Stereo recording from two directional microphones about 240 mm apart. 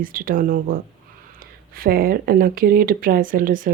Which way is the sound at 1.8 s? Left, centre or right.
Right.